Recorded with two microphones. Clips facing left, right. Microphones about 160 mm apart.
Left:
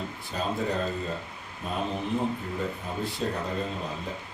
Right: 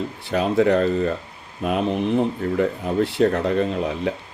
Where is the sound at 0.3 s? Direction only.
75° right (ahead or behind).